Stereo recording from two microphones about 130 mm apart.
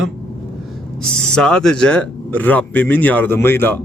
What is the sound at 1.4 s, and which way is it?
Speech, 5° left (ahead or behind).